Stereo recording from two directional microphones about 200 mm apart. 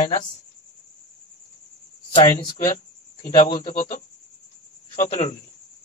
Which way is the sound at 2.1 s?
25° left (ahead or behind).